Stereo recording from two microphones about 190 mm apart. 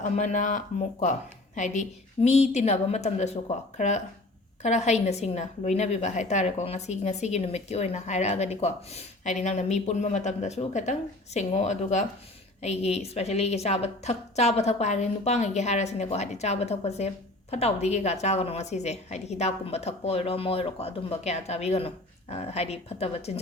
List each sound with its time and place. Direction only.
0.0 s a woman's voice: 40° left (ahead or behind)